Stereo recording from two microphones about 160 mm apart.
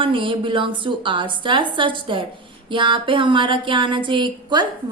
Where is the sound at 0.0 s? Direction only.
30° right (ahead or behind).